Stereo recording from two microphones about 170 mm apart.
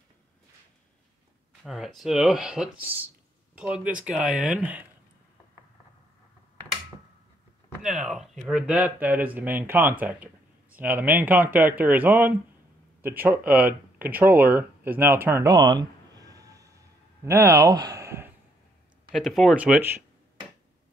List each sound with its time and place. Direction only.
1.6 s speech: centre (ahead or behind)
7.9 s speech: 5° right (ahead or behind)
19.1 s speech: centre (ahead or behind)